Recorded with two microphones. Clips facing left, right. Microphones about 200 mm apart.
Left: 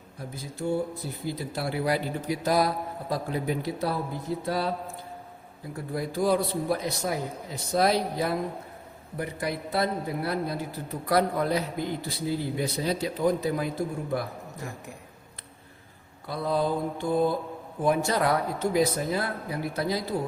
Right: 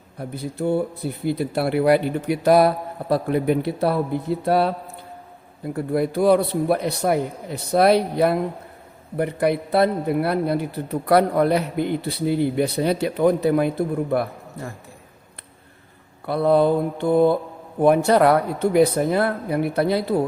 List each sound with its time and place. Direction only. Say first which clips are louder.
0.2 s a man's voice: right 8 dB; 60° right (ahead or behind)
16.2 s a man's voice: right 10 dB; 65° right (ahead or behind)